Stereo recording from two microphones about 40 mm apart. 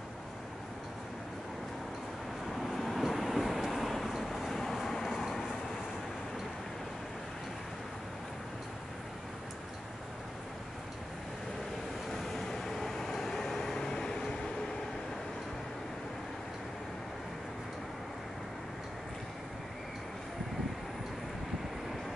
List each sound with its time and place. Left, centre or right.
2.5 s vehicle: centre
12.1 s vehicle: centre